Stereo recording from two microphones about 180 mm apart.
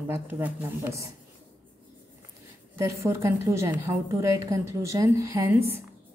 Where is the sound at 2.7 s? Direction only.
15° right (ahead or behind).